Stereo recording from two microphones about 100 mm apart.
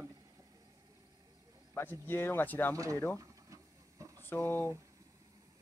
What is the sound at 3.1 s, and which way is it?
Vehicle, 30° right (ahead or behind).